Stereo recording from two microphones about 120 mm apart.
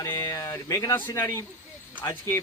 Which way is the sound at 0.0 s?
25° left (ahead or behind).